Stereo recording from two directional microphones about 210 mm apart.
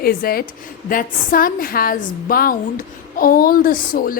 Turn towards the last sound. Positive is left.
turn(degrees=40)  # may be behind; listen again after turning